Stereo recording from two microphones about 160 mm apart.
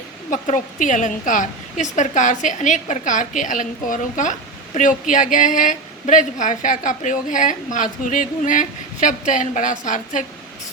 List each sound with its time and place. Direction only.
0.3 s a woman's voice: 50° left (ahead or behind)